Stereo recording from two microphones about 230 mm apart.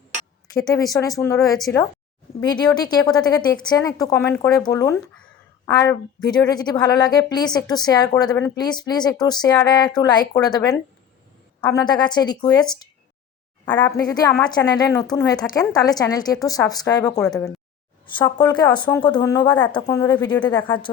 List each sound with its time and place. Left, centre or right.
0.5 s a woman's voice: centre
1.5 s a woman's voice: centre
2.4 s a woman's voice: centre
18.0 s a woman's voice: left